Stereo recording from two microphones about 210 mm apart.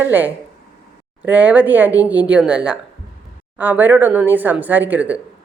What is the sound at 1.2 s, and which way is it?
Speech, 5° right (ahead or behind).